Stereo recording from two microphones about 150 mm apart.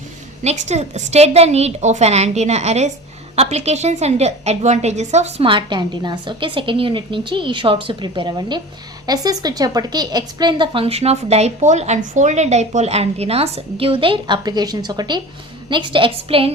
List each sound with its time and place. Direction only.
0.4 s a woman's voice: 50° right (ahead or behind)